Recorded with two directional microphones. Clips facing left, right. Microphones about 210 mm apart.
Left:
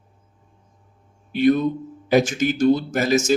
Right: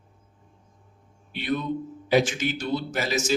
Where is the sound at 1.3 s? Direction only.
45° left (ahead or behind).